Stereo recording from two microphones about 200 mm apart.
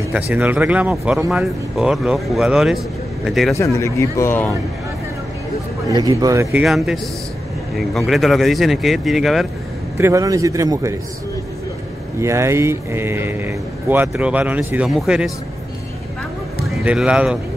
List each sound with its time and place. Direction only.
0.1 s speech: 10° right (ahead or behind)
3.5 s speech: 15° left (ahead or behind)
5.9 s speech: 15° right (ahead or behind)
6.6 s speech: centre (ahead or behind)
9.9 s speech: 15° right (ahead or behind)
12.2 s speech: 15° right (ahead or behind)
16.6 s speech: centre (ahead or behind)